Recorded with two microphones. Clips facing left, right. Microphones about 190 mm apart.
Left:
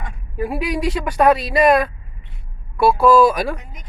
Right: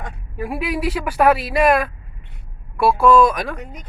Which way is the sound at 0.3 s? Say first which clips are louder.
Left 2 dB; centre (ahead or behind).